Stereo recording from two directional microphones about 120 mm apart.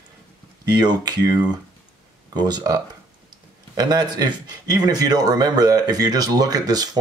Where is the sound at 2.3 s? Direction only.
35° right (ahead or behind).